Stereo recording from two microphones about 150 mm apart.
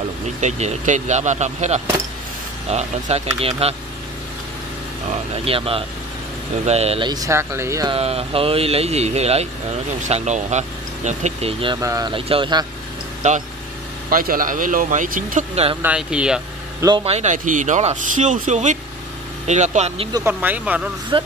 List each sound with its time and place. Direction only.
0.4 s speech: 50° right (ahead or behind)
5.3 s speech: 40° right (ahead or behind)
7.1 s speech: 20° right (ahead or behind)
7.9 s speech: 40° right (ahead or behind)
11.6 s speech: 25° right (ahead or behind)
12.1 s speech: 35° right (ahead or behind)
13.2 s speech: 55° right (ahead or behind)
14.1 s speech: 70° right (ahead or behind)
15.5 s speech: 40° right (ahead or behind)
15.8 s speech: 5° right (ahead or behind)
17.0 s speech: 45° right (ahead or behind)
20.1 s speech: 25° right (ahead or behind)
20.3 s speech: 10° right (ahead or behind)
21.1 s speech: 30° right (ahead or behind)